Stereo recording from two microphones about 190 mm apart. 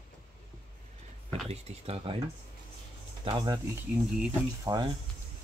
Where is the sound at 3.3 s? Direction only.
25° right (ahead or behind).